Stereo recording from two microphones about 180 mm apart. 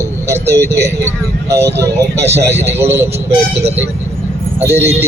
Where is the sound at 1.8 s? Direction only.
15° right (ahead or behind).